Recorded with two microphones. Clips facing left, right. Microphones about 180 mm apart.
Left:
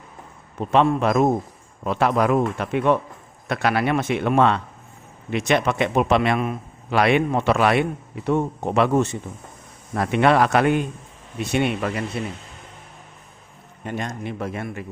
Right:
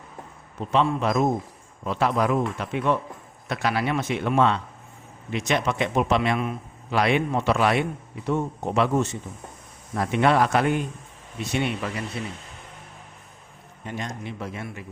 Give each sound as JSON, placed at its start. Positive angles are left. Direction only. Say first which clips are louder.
{"t": 0.7, "sound": "a man's voice", "louder": "left 4 dB", "side_deg": 60}
{"t": 11.5, "sound": "speech", "louder": "left 5 dB", "side_deg": 60}
{"t": 13.8, "sound": "speech", "louder": "left 4 dB", "side_deg": 55}